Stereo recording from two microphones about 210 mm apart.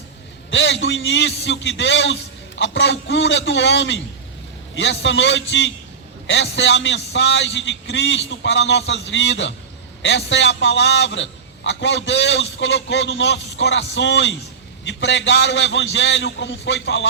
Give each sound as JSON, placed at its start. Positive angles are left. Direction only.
{"t": 0.5, "sound": "a man's voice", "side_deg": 60}